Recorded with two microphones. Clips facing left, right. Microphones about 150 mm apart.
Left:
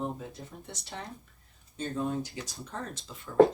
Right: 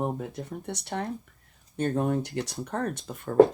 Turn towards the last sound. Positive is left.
turn(degrees=-50)  # may be behind; listen again after turning